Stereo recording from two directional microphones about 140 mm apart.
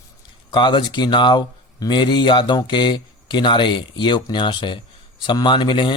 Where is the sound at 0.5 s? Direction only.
35° left (ahead or behind).